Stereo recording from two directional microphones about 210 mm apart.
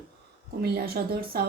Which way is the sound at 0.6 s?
45° right (ahead or behind).